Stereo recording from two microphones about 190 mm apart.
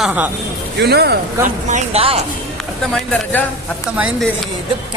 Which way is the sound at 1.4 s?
35° right (ahead or behind).